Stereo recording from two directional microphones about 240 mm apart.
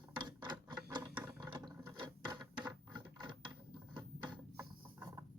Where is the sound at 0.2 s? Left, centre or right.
Centre.